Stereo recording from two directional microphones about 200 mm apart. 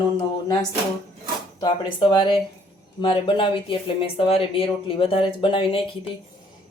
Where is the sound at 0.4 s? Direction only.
20° left (ahead or behind).